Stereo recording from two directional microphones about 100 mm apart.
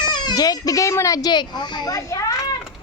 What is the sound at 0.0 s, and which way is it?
Speech, 45° left (ahead or behind).